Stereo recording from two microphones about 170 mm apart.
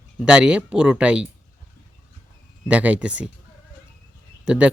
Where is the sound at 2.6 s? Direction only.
5° right (ahead or behind).